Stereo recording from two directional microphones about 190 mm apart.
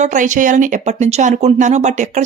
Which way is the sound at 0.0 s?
40° right (ahead or behind).